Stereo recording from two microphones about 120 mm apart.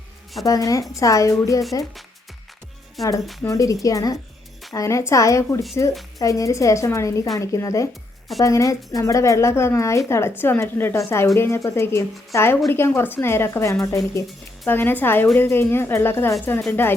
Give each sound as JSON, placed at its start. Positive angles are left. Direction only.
{"t": 0.4, "sound": "speech", "side_deg": 30}
{"t": 3.0, "sound": "speech", "side_deg": 0}
{"t": 3.4, "sound": "speech", "side_deg": 25}
{"t": 14.7, "sound": "a woman's voice", "side_deg": 15}